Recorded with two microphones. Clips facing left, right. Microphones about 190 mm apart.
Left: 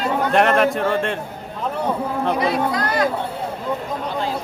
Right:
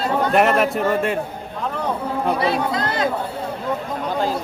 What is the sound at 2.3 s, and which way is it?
Speech, 30° right (ahead or behind).